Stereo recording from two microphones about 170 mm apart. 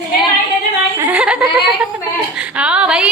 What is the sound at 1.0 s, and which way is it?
Speech, 10° right (ahead or behind).